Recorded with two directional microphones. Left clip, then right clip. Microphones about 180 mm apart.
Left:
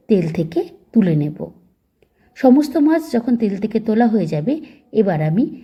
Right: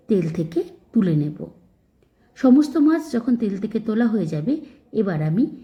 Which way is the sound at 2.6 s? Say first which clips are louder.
Left 3 dB; 25° left (ahead or behind).